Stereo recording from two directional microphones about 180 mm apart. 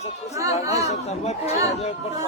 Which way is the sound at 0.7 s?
35° left (ahead or behind).